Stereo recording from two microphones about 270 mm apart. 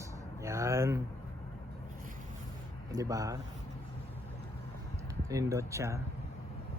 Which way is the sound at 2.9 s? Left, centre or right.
Centre.